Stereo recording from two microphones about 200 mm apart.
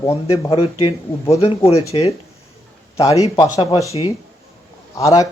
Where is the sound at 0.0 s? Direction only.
15° left (ahead or behind).